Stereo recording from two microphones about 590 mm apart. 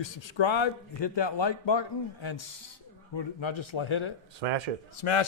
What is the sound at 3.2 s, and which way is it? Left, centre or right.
Speech, left.